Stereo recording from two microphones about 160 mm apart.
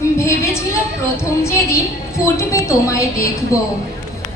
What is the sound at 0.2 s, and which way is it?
A woman's voice, 15° left (ahead or behind).